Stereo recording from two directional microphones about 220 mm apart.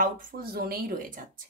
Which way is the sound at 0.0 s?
40° right (ahead or behind).